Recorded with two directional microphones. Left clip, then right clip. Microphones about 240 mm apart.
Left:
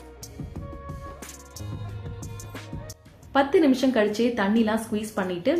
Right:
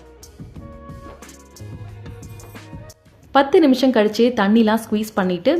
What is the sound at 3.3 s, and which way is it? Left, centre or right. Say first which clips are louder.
A woman's voice: right 6 dB; right.